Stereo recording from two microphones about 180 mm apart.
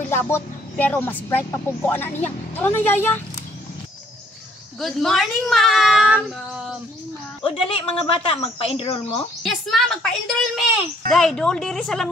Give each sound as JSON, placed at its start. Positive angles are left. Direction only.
{"t": 0.1, "sound": "speech", "side_deg": 10}
{"t": 4.7, "sound": "speech", "side_deg": 0}
{"t": 7.4, "sound": "a woman's voice", "side_deg": 25}
{"t": 9.4, "sound": "speech", "side_deg": 0}